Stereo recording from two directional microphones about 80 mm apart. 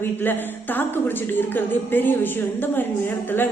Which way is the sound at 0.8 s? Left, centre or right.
Left.